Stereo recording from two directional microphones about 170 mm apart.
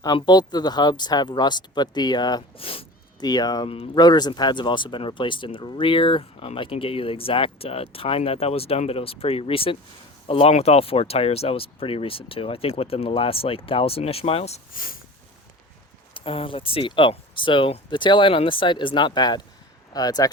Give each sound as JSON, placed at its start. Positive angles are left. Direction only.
{"t": 0.0, "sound": "speech", "side_deg": 25}
{"t": 14.7, "sound": "speech", "side_deg": 55}
{"t": 16.1, "sound": "speech", "side_deg": 35}